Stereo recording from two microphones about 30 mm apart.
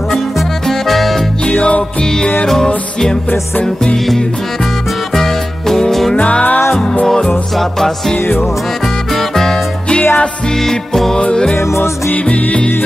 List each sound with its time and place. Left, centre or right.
0.7 s music: centre
1.6 s music: left
2.4 s music: centre
5.1 s music: centre
8.8 s music: centre
9.8 s music: left
10.6 s music: centre